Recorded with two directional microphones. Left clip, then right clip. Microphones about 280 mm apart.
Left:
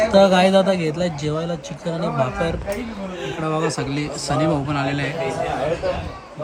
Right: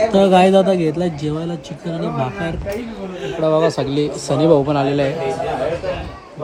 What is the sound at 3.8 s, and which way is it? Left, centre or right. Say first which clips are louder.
Speech: right 7 dB; centre.